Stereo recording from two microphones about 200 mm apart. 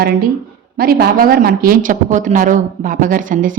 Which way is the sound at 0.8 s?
50° right (ahead or behind).